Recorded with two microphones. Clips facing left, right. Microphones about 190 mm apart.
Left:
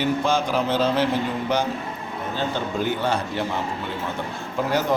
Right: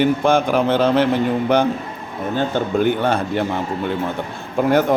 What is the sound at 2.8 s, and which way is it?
Speech, 55° right (ahead or behind).